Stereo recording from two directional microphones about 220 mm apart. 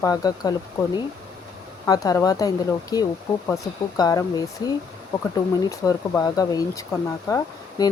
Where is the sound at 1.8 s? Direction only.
15° left (ahead or behind).